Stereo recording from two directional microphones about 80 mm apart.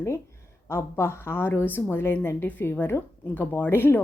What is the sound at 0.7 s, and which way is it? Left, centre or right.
A woman's voice, left.